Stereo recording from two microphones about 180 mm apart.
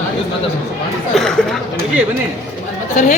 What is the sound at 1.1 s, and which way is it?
Speech, centre (ahead or behind).